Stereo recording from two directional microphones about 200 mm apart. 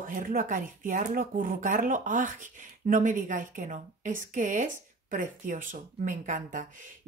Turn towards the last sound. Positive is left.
turn(degrees=-40)  # may be behind; listen again after turning